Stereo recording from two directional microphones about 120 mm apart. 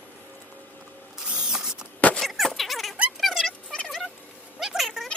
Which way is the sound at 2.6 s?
Centre (ahead or behind).